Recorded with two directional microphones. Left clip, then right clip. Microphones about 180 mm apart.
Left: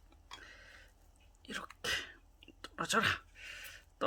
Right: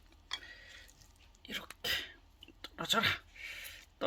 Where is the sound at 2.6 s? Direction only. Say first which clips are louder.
Right 1 dB; 20° left (ahead or behind).